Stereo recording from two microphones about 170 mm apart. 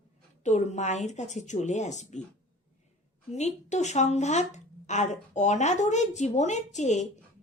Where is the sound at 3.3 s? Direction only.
40° left (ahead or behind).